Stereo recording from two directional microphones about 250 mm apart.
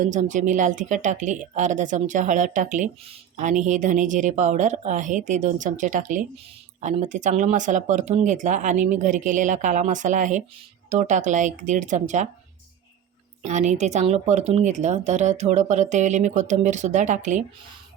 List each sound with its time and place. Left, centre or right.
0.0 s a woman's voice: right
13.4 s a woman's voice: right